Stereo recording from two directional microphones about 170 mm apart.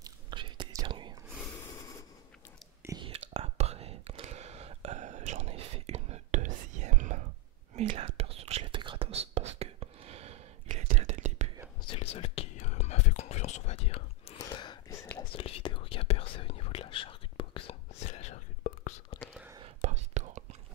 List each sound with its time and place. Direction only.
0.0 s whispering: 25° right (ahead or behind)
1.7 s a sound: 20° left (ahead or behind)
2.8 s whispering: 15° right (ahead or behind)
3.3 s whispering: 35° right (ahead or behind)
7.7 s whispering: 30° right (ahead or behind)
11.8 s whispering: 35° left (ahead or behind)
19.6 s whispering: 40° right (ahead or behind)